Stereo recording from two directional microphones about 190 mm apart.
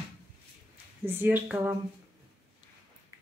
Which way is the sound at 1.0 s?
10° right (ahead or behind).